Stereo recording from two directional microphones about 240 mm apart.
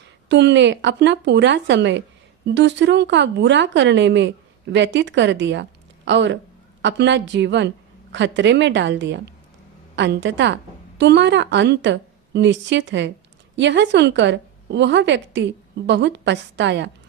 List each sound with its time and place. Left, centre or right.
0.3 s a woman's voice: right